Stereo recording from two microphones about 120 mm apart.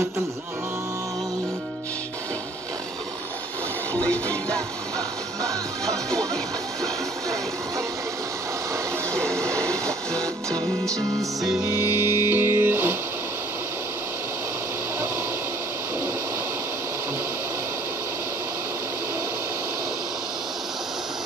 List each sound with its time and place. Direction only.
3.9 s music: 10° left (ahead or behind)
9.1 s music: 5° left (ahead or behind)
11.6 s music: 20° right (ahead or behind)